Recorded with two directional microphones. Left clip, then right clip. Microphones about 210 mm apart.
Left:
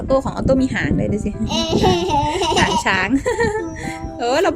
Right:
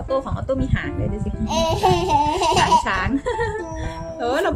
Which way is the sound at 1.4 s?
Centre (ahead or behind).